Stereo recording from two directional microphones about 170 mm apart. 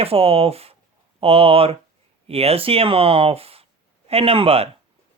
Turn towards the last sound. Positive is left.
turn(degrees=-35)  # may be behind; listen again after turning